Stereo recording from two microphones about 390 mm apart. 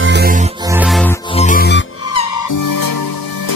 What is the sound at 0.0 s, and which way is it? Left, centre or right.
Music, right.